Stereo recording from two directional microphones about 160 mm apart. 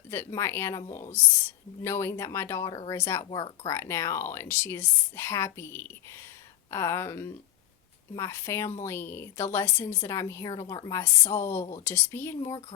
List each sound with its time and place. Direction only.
0.1 s a woman's voice: 15° left (ahead or behind)